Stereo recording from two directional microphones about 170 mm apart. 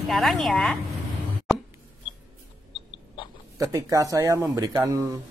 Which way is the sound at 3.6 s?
20° right (ahead or behind).